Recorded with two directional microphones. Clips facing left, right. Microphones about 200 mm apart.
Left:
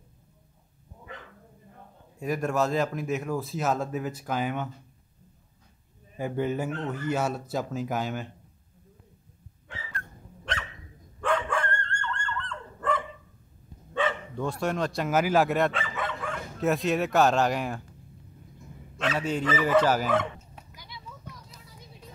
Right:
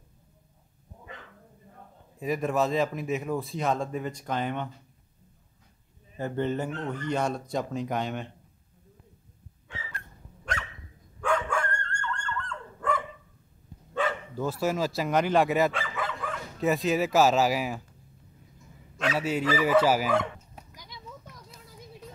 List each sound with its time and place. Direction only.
2.1 s speech: centre (ahead or behind)
6.1 s speech: 10° left (ahead or behind)
11.1 s dog: centre (ahead or behind)
13.9 s speech: centre (ahead or behind)
18.9 s speech: 5° right (ahead or behind)
20.7 s children playing: 40° right (ahead or behind)